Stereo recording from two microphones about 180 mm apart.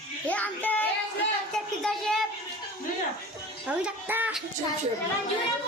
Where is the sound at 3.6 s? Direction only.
10° right (ahead or behind).